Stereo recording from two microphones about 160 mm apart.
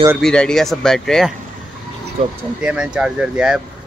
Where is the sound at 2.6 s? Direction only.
5° right (ahead or behind).